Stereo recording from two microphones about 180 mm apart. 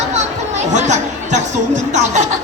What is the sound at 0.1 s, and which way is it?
Speech, 40° right (ahead or behind).